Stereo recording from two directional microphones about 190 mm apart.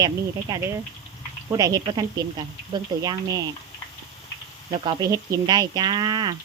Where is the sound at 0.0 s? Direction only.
20° right (ahead or behind).